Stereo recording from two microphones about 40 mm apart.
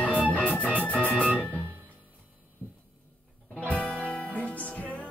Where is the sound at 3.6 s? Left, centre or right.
Left.